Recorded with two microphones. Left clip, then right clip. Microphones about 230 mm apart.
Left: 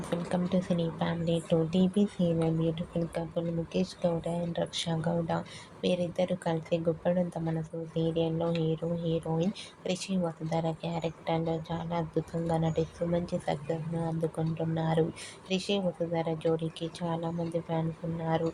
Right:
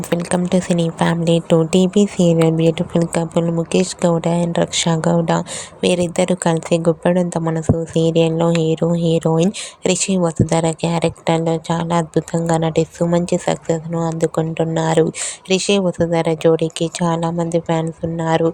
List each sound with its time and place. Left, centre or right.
0.1 s speech: right